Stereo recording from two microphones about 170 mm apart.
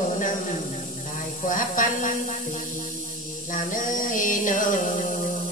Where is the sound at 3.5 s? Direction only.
50° left (ahead or behind).